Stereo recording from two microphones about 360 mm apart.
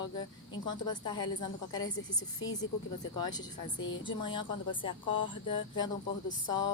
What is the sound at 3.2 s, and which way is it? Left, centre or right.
Speech, centre.